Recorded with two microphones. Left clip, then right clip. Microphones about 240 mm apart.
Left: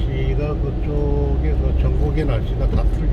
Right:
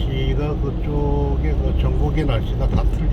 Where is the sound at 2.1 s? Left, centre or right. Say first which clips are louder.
Even; centre.